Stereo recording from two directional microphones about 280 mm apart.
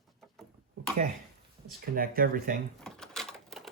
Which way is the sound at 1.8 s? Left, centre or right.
Right.